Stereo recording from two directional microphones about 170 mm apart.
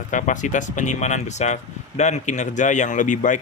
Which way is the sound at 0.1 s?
50° left (ahead or behind).